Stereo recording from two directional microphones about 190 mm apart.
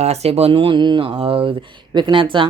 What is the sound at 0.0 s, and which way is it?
Speech, 35° right (ahead or behind).